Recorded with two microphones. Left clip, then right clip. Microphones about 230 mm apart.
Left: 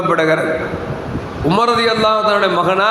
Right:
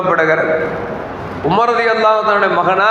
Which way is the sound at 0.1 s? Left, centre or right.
Left.